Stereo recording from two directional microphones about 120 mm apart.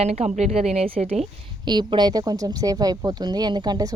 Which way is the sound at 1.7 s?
40° right (ahead or behind).